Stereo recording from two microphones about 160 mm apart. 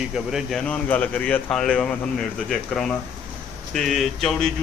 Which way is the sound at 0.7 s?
10° left (ahead or behind).